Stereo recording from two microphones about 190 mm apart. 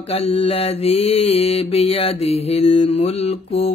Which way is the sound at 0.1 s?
30° left (ahead or behind).